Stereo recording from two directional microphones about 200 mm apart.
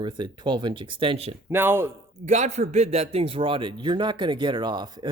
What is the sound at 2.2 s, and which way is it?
Speech, 35° right (ahead or behind).